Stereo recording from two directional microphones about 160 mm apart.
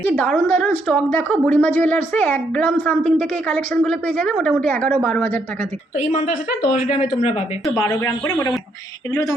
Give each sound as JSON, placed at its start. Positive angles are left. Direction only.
{"t": 0.0, "sound": "a woman's voice", "side_deg": 10}
{"t": 6.7, "sound": "speech", "side_deg": 45}
{"t": 7.8, "sound": "speech", "side_deg": 20}